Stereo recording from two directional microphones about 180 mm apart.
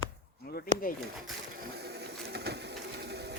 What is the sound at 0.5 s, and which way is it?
Speech, 55° left (ahead or behind).